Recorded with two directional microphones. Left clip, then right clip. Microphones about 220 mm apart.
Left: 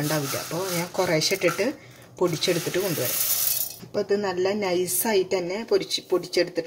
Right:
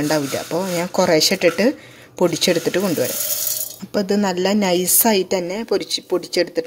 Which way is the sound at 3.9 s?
40° right (ahead or behind).